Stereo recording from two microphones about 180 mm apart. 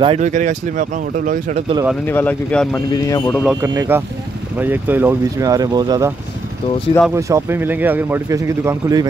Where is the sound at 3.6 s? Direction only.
15° right (ahead or behind).